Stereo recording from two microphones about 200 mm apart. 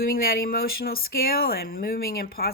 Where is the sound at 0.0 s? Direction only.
45° left (ahead or behind).